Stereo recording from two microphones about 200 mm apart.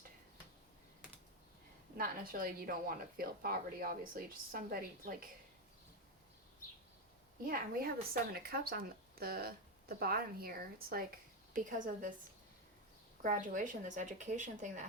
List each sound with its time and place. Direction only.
2.0 s a woman's voice: 45° right (ahead or behind)
7.4 s a woman's voice: 45° right (ahead or behind)
13.2 s a woman's voice: 40° right (ahead or behind)